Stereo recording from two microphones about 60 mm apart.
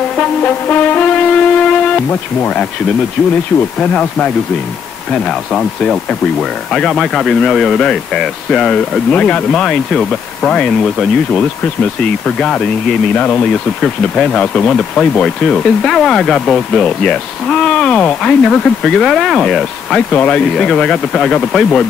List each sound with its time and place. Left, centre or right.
0.5 s brass instrument: left
5.1 s speech: centre
9.1 s speech: centre
9.5 s speech: centre
20.2 s speech: left